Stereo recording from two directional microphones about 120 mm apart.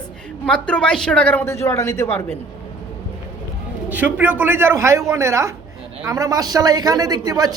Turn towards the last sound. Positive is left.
turn(degrees=-30)  # may be behind; listen again after turning